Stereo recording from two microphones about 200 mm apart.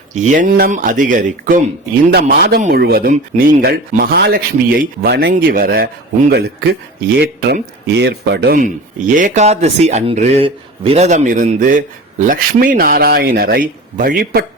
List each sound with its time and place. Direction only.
0.1 s speech: 35° right (ahead or behind)
2.1 s speech: 55° right (ahead or behind)
2.6 s speech: 40° right (ahead or behind)